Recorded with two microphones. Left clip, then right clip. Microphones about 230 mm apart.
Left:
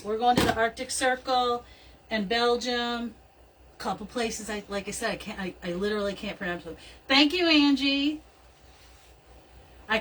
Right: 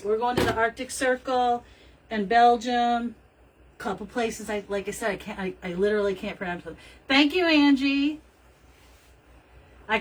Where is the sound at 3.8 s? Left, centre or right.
Centre.